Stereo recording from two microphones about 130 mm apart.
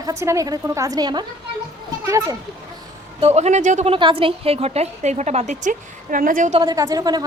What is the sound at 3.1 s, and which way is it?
Speech, 55° right (ahead or behind).